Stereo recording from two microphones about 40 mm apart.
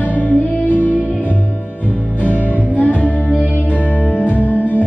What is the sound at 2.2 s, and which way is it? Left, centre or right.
Music, left.